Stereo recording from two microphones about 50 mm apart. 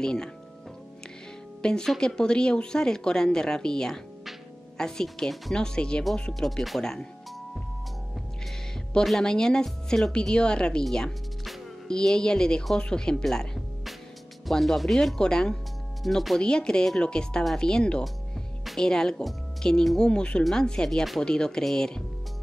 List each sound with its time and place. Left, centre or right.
0.0 s speech: centre
1.6 s speech: centre
6.4 s speech: centre
9.2 s speech: centre
14.5 s speech: centre
15.1 s speech: centre
16.0 s speech: centre
16.3 s speech: centre